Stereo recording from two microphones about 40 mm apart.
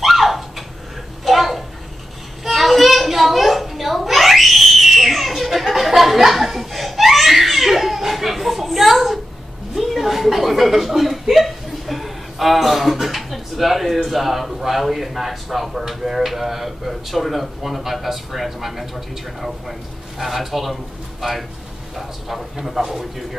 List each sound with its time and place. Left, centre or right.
0.0 s a sound: centre
9.8 s chuckle: centre
14.0 s a man's voice: centre